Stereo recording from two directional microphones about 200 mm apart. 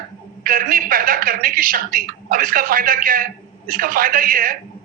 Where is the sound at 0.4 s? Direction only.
45° right (ahead or behind).